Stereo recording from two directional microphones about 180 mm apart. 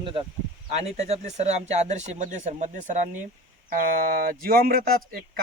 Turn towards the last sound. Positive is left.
turn(degrees=-55)  # may be behind; listen again after turning